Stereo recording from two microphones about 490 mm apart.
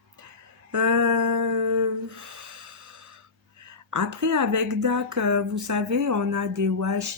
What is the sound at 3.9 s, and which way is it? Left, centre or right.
A woman's voice, right.